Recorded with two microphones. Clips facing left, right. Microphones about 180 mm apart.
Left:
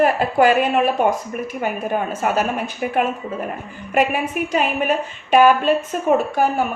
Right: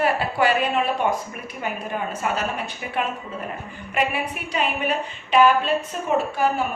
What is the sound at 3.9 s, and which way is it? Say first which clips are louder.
A woman's voice: left 6 dB; 45° left (ahead or behind).